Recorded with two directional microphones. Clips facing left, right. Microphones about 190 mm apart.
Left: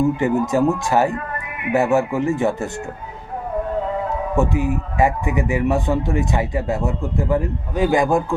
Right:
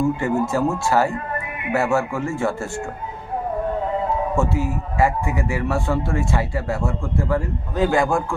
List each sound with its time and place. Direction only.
0.0 s speech: 20° left (ahead or behind)
4.4 s speech: 15° left (ahead or behind)